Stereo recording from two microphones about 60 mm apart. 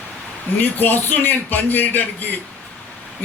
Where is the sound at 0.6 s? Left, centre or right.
Left.